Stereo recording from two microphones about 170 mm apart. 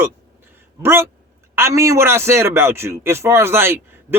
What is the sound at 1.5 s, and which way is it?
A man's voice, 15° right (ahead or behind).